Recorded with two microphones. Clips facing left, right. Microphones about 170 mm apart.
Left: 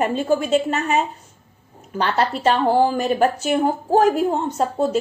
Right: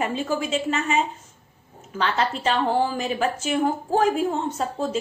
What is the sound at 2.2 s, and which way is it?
A woman's voice, 50° left (ahead or behind).